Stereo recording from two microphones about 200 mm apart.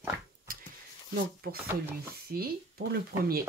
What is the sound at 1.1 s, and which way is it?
Speech, 50° right (ahead or behind).